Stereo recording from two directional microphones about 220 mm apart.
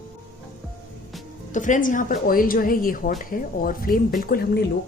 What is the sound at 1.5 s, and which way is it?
A woman's voice, 35° left (ahead or behind).